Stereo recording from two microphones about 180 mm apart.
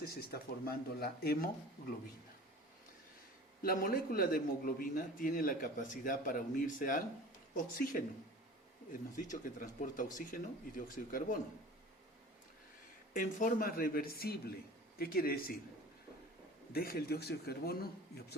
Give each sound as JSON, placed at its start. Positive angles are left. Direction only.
{"t": 0.0, "sound": "a man's voice", "side_deg": 60}
{"t": 3.6, "sound": "a man's voice", "side_deg": 55}
{"t": 9.3, "sound": "a man's voice", "side_deg": 45}
{"t": 13.1, "sound": "a man's voice", "side_deg": 50}
{"t": 16.7, "sound": "a man's voice", "side_deg": 60}